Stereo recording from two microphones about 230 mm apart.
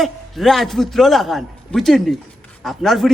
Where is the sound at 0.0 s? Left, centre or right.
Centre.